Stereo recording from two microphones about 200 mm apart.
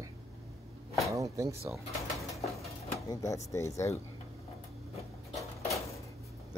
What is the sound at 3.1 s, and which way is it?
Speech, 15° left (ahead or behind).